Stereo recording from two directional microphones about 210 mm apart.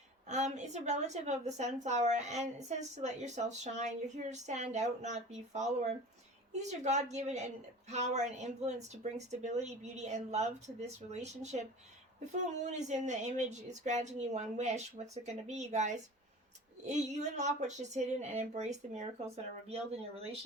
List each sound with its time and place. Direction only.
0.3 s a woman's voice: 35° right (ahead or behind)